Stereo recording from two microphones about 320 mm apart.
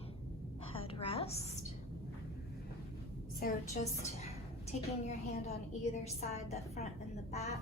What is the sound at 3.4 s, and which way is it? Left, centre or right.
A woman's voice, left.